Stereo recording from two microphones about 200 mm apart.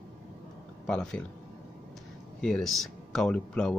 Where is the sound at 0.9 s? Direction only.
5° left (ahead or behind).